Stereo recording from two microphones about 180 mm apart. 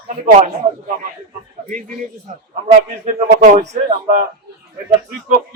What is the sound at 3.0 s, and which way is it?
A man's voice, 40° right (ahead or behind).